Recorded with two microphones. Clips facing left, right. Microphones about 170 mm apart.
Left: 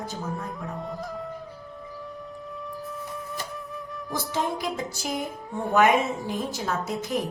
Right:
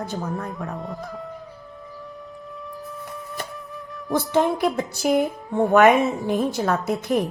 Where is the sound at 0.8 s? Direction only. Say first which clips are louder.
Right 1 dB; centre (ahead or behind).